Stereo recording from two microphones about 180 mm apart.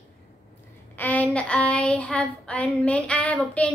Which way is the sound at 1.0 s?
10° left (ahead or behind).